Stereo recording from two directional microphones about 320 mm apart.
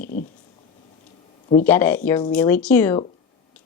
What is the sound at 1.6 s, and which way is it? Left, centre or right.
A woman's voice, centre.